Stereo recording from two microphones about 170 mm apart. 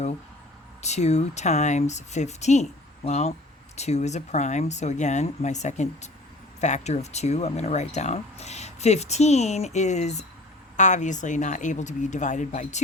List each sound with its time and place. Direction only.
0.8 s speech: 40° left (ahead or behind)